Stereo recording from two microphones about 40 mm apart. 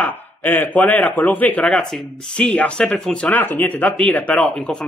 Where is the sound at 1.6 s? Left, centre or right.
Left.